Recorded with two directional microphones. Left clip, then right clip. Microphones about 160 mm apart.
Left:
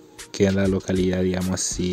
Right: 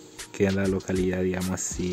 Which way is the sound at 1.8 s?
45° left (ahead or behind).